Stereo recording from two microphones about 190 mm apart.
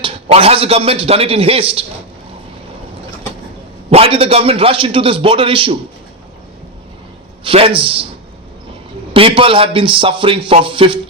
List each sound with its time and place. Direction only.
0.0 s a man's voice: 30° right (ahead or behind)
3.8 s a man's voice: 30° right (ahead or behind)
7.4 s a man's voice: 30° right (ahead or behind)
9.1 s a man's voice: 30° right (ahead or behind)